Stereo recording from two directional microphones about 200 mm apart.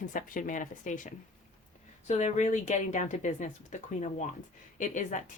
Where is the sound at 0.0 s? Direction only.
40° left (ahead or behind).